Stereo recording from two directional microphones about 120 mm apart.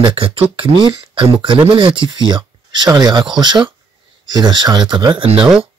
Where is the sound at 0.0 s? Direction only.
45° right (ahead or behind).